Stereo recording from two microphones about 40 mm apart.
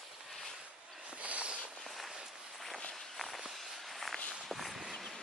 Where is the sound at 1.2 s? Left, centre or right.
Right.